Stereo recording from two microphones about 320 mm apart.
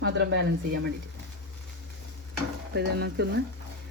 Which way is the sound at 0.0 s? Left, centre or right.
Right.